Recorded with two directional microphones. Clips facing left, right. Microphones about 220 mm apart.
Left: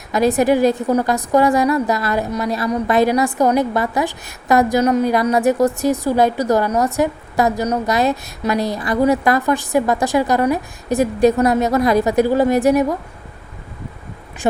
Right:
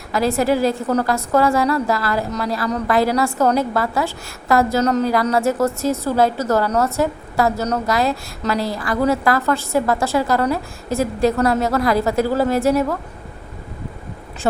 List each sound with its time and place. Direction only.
0.1 s a woman's voice: 20° left (ahead or behind)